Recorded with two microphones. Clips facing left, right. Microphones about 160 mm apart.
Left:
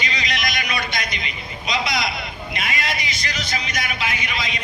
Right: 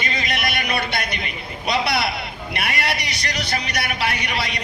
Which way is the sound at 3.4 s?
65° right (ahead or behind).